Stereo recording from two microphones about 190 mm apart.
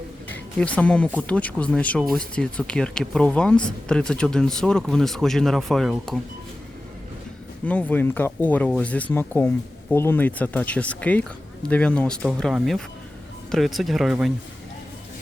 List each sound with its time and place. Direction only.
0.3 s speech: 5° left (ahead or behind)
7.6 s speech: 10° left (ahead or behind)